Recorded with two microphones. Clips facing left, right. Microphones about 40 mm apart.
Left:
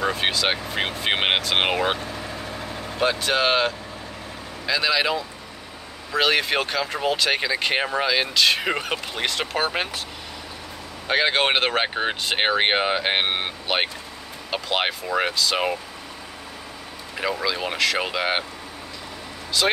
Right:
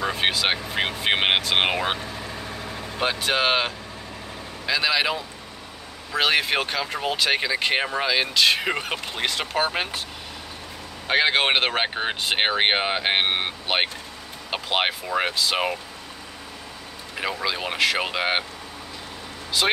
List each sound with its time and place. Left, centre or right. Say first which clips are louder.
0.0 s speech: left 1 dB; centre
3.0 s speech: left 2 dB; centre
11.1 s speech: even; centre
17.2 s speech: left 2 dB; centre
19.6 s speech: left 1 dB; centre